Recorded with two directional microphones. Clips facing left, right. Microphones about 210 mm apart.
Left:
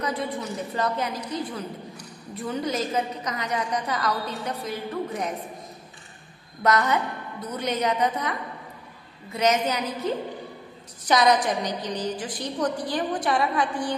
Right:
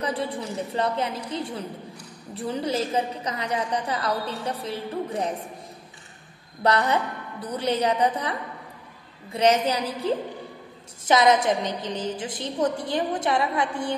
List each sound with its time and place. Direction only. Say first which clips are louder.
0.0 s a woman's voice: right 1 dB; 30° right (ahead or behind)
6.6 s a woman's voice: even; 30° right (ahead or behind)